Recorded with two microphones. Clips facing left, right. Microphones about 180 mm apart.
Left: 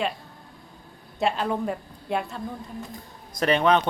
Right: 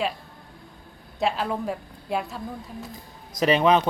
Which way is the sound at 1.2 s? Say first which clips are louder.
Left 1 dB; centre (ahead or behind).